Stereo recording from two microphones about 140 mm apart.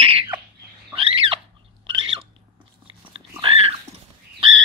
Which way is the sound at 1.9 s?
35° right (ahead or behind).